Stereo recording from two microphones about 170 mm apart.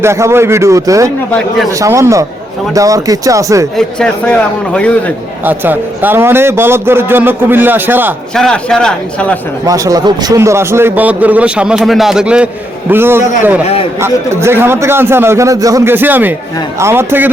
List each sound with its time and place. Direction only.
0.0 s a man's voice: 15° right (ahead or behind)
3.8 s a man's voice: 5° left (ahead or behind)
5.5 s a man's voice: 10° right (ahead or behind)
8.4 s a man's voice: 5° left (ahead or behind)
9.6 s a man's voice: 20° right (ahead or behind)